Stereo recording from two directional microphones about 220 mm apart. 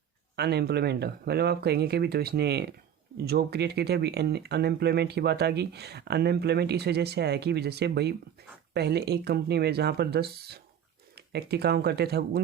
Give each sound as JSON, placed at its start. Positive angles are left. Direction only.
{"t": 0.3, "sound": "speech", "side_deg": -45}